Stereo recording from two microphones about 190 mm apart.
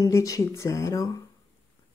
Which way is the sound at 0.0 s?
15° left (ahead or behind).